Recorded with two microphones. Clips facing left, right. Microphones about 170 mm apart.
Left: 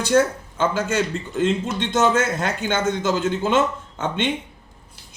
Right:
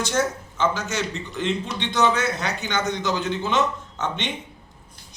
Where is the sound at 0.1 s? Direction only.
55° left (ahead or behind).